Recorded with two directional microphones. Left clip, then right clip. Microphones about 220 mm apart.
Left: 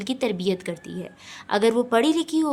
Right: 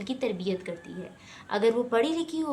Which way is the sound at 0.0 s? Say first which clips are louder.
Left 5 dB; 50° left (ahead or behind).